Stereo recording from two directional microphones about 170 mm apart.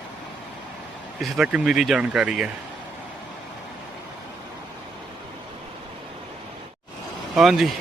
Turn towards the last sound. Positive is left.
turn(degrees=0)  # may be behind; listen again after turning